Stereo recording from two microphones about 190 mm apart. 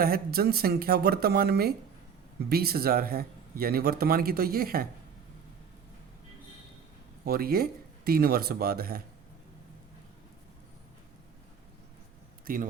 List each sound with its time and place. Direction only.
0.0 s speech: 55° right (ahead or behind)
7.3 s speech: 55° right (ahead or behind)
12.5 s speech: 50° right (ahead or behind)